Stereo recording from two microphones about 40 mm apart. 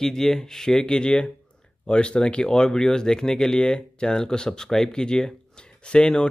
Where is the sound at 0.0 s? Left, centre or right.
Centre.